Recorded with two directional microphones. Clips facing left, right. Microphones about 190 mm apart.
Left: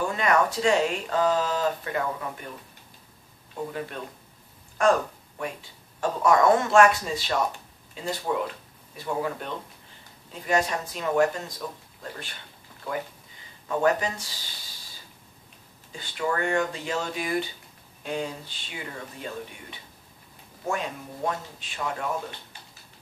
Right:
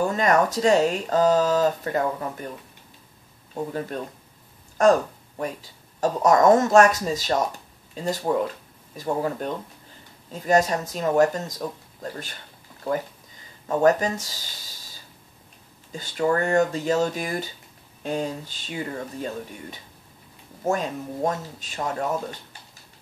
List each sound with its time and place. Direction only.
0.1 s speech: 40° right (ahead or behind)
3.6 s speech: 40° right (ahead or behind)
13.7 s speech: 40° right (ahead or behind)
15.9 s speech: 40° right (ahead or behind)